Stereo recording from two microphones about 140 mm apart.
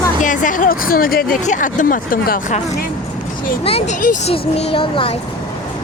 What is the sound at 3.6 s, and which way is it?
Speech, 45° left (ahead or behind).